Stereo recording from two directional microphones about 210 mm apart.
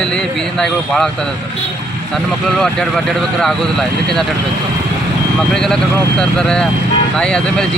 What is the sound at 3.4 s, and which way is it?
Speech, centre (ahead or behind).